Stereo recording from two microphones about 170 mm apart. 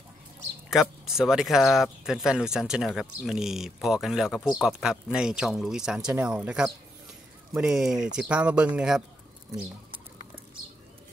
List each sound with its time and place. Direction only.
0.7 s speech: 5° right (ahead or behind)
9.8 s bird: 30° right (ahead or behind)